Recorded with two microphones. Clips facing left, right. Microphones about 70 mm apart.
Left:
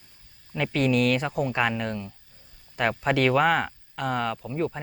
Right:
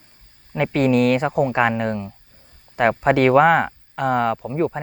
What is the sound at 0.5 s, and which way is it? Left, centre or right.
Speech, right.